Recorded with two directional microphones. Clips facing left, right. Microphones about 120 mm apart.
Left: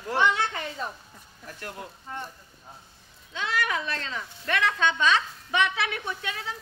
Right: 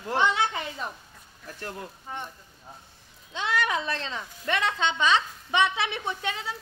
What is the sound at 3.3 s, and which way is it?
Speech, 25° right (ahead or behind).